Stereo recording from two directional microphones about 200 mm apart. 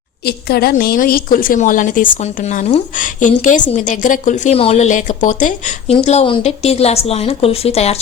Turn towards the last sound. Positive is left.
turn(degrees=30)  # may be behind; listen again after turning